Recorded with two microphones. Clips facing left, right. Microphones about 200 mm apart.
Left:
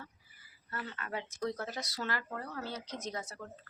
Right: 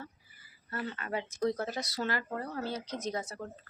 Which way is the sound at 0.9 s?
20° right (ahead or behind).